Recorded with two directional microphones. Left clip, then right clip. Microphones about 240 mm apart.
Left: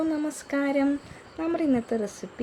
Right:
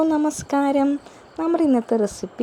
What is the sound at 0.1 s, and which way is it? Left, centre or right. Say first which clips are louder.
A woman's voice: right 8 dB; right.